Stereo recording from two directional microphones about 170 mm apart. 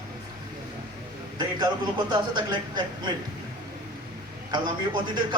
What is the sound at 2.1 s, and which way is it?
Speech, 25° right (ahead or behind).